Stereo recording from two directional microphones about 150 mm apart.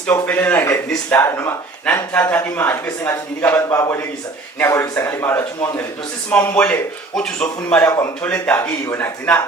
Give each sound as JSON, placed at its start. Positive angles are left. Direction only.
{"t": 0.1, "sound": "a man's voice", "side_deg": 15}